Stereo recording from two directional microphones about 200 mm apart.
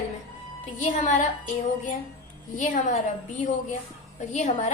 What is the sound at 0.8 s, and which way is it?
A woman's voice, 40° left (ahead or behind).